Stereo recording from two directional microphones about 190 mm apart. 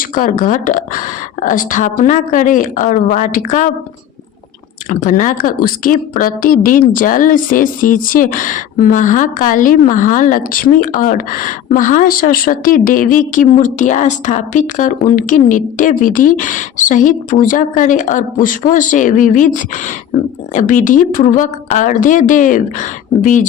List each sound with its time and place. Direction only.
0.0 s a woman's voice: 45° left (ahead or behind)
4.9 s a woman's voice: 40° left (ahead or behind)